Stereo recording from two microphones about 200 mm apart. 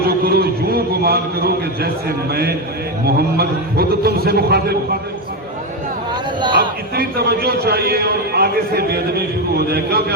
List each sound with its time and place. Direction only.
0.1 s a man's voice: 50° right (ahead or behind)
6.6 s a man's voice: 50° right (ahead or behind)